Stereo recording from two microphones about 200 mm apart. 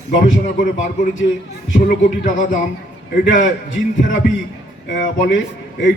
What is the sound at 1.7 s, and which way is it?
Music, 40° left (ahead or behind).